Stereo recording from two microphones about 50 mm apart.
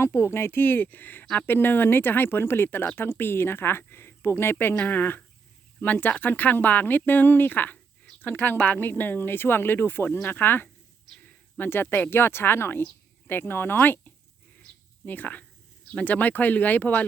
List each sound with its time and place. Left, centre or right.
0.0 s speech: left
4.5 s speech: left
8.8 s speech: left
11.2 s a sound: left
12.1 s speech: left
14.6 s a sound: left
16.0 s speech: left